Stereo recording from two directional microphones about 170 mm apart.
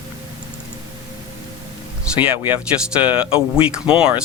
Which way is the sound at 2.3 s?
10° right (ahead or behind).